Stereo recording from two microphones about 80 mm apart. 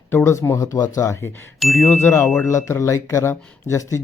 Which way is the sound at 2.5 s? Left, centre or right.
Left.